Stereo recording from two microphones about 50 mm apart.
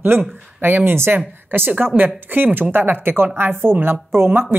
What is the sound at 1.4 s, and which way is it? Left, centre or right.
A woman's voice, right.